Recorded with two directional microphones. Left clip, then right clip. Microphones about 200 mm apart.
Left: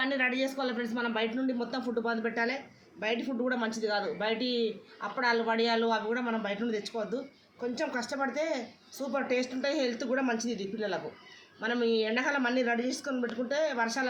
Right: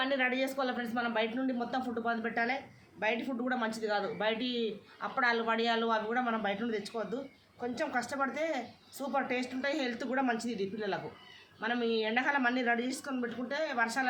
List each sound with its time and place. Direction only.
0.0 s a man's voice: 15° right (ahead or behind)